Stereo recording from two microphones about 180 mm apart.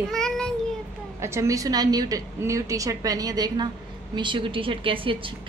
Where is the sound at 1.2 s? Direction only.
15° right (ahead or behind).